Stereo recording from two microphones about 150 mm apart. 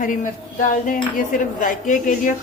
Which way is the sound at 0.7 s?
60° left (ahead or behind).